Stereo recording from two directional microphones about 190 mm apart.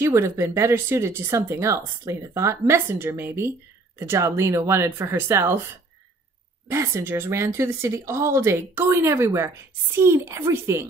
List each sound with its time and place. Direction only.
0.0 s speech: 15° right (ahead or behind)
6.7 s speech: 15° right (ahead or behind)